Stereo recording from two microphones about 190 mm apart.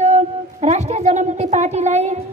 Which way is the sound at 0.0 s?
35° right (ahead or behind).